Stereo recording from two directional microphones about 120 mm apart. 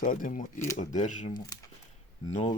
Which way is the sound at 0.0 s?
90° left.